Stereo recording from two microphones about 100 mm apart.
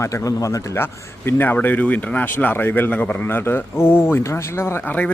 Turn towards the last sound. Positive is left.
turn(degrees=20)  # may be behind; listen again after turning